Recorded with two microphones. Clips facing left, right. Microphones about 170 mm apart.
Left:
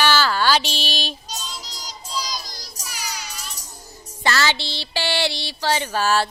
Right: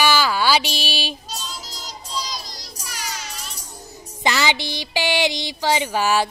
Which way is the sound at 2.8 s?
Centre (ahead or behind).